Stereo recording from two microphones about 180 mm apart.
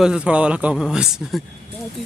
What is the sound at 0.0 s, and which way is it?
Speech, 5° right (ahead or behind).